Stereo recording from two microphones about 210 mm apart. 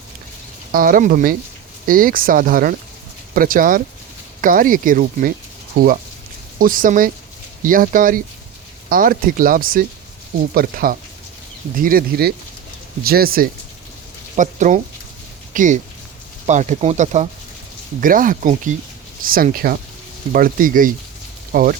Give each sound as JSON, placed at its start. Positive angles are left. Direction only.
{"t": 0.7, "sound": "speech", "side_deg": -40}